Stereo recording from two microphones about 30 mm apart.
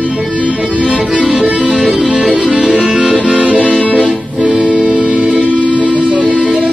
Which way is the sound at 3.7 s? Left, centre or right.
Left.